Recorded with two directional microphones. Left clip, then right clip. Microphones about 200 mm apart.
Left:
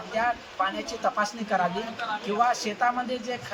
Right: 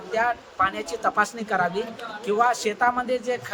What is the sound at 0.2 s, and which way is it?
A man's voice, 25° right (ahead or behind).